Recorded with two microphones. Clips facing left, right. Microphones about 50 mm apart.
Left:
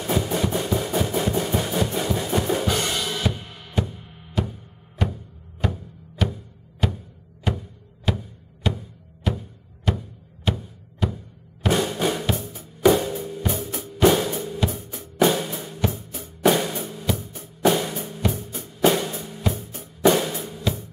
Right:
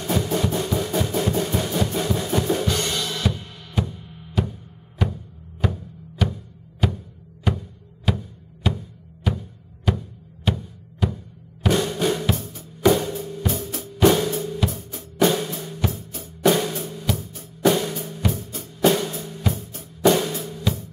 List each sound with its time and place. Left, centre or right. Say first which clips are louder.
0.0 s music: even; centre
4.4 s music: right 1 dB; centre
8.1 s music: right 1 dB; centre
11.6 s drum: right 1 dB; centre
12.4 s music: left 1 dB; centre
13.2 s drum kit: even; centre
13.9 s music: right 1 dB; centre
14.7 s drum kit: left 1 dB; left
15.1 s drum: even; centre
17.1 s music: left 1 dB; centre
20.3 s drum: right 1 dB; centre